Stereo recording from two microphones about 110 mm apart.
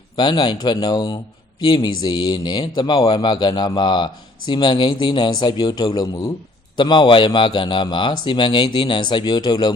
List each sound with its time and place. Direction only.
0.2 s speech: 40° left (ahead or behind)